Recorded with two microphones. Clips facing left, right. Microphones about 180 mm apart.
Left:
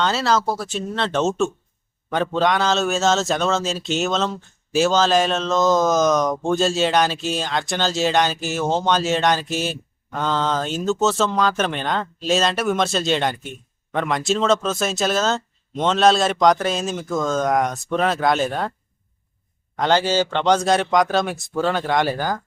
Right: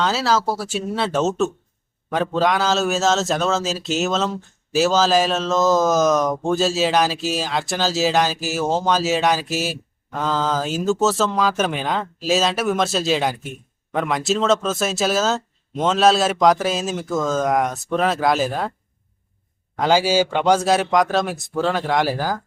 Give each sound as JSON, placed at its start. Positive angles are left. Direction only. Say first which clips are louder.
{"t": 0.0, "sound": "a man's voice", "louder": "even", "side_deg": 0}
{"t": 19.7, "sound": "a man's voice", "louder": "right 1 dB", "side_deg": -5}